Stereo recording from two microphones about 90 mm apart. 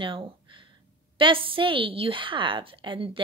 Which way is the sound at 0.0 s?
70° right (ahead or behind).